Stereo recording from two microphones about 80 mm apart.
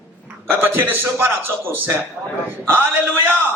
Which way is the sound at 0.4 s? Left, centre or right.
Right.